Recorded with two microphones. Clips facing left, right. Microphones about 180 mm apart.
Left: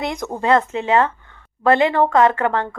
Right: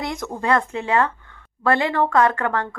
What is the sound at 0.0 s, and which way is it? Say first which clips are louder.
A woman's voice: left 3 dB; 20° left (ahead or behind).